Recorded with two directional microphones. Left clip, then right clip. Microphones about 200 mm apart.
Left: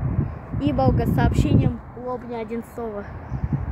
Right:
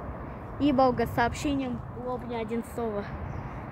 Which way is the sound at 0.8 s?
5° left (ahead or behind).